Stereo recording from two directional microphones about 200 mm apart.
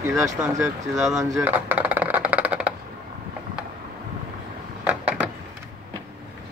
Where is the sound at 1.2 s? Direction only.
10° right (ahead or behind).